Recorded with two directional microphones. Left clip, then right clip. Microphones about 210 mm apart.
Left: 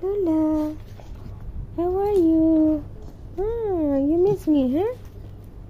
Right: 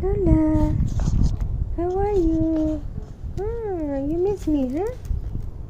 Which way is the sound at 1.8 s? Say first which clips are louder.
Left 1 dB; 25° left (ahead or behind).